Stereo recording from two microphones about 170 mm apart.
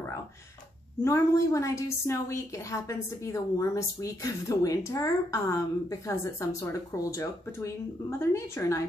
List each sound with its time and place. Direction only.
1.0 s a woman's voice: 15° left (ahead or behind)